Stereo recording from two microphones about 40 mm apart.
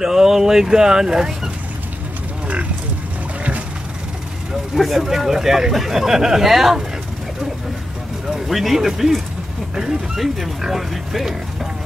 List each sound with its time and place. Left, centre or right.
0.0 s speech: centre
4.7 s speech: centre
8.3 s speech: centre